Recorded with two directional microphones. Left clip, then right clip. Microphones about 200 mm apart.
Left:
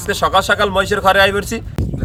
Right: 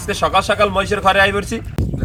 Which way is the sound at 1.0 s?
30° left (ahead or behind).